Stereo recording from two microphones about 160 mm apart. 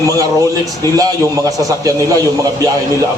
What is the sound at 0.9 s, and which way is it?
A man's voice, 20° right (ahead or behind).